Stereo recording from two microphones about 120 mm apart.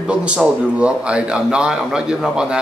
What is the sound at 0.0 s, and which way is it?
A man's voice, 10° right (ahead or behind).